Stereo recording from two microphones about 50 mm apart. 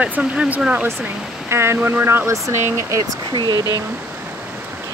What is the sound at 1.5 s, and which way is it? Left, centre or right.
Speech, right.